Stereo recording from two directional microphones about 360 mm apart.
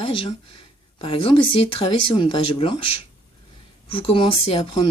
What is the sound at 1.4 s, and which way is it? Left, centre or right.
Speech, left.